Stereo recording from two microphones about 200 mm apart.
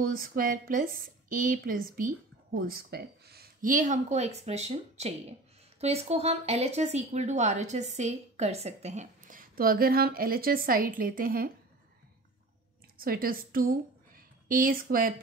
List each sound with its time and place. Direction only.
0.0 s a woman's voice: 45° right (ahead or behind)
12.9 s a woman's voice: 45° right (ahead or behind)